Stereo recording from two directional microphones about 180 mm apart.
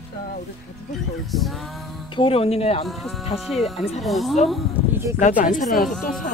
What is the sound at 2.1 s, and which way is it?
Speech, 30° left (ahead or behind).